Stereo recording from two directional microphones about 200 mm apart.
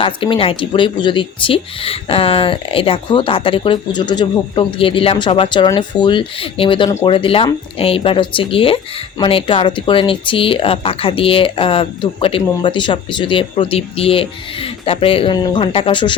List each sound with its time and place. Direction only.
0.0 s speech: 25° left (ahead or behind)